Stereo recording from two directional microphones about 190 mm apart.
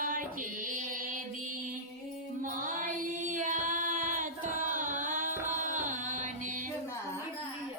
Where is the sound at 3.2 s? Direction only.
40° right (ahead or behind).